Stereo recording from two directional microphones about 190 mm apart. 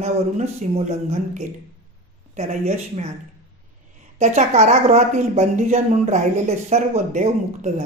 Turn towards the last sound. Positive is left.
turn(degrees=-35)  # may be behind; listen again after turning